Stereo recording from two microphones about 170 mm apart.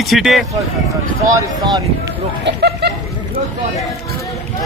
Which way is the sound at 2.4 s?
75° right (ahead or behind).